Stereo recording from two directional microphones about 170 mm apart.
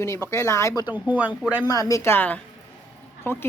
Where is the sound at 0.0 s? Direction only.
15° left (ahead or behind).